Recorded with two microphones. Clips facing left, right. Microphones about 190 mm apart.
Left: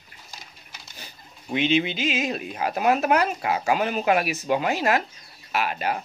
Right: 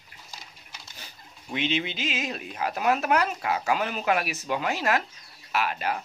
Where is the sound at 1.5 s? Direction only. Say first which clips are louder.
Left 6 dB; 10° left (ahead or behind).